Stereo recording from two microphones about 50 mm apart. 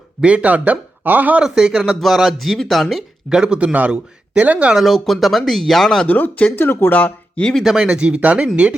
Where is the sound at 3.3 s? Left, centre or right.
Centre.